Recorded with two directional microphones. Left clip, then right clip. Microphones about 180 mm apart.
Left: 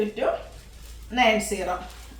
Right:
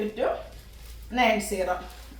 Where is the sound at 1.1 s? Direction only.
15° left (ahead or behind).